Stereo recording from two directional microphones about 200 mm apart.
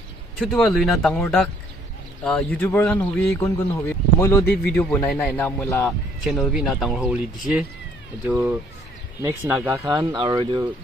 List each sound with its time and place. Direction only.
0.4 s speech: centre (ahead or behind)
6.2 s speech: centre (ahead or behind); by 10.7 s 20° right (ahead or behind)